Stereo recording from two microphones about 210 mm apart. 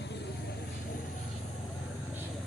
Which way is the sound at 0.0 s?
55° left (ahead or behind).